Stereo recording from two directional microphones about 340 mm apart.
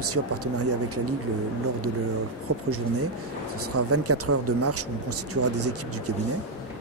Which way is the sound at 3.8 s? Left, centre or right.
Right.